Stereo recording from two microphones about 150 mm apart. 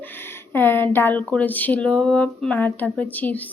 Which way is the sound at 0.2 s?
15° left (ahead or behind).